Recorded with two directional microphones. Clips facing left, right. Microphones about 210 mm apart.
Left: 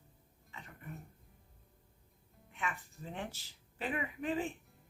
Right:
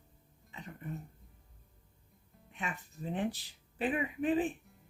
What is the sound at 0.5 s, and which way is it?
Throat clearing, 25° right (ahead or behind).